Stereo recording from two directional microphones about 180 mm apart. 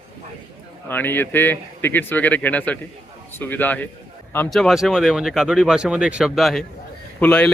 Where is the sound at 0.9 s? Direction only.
10° left (ahead or behind).